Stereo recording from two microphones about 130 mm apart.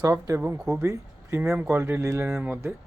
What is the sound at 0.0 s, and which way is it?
Speech, 25° right (ahead or behind).